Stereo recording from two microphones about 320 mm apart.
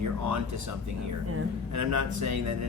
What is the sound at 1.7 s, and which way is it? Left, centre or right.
Speech, right.